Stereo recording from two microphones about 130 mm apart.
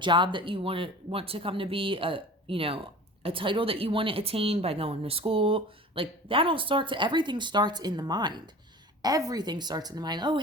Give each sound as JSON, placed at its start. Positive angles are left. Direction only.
{"t": 0.0, "sound": "a woman's voice", "side_deg": -40}